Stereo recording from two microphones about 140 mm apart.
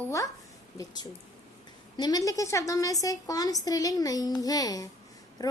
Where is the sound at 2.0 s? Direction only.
30° left (ahead or behind).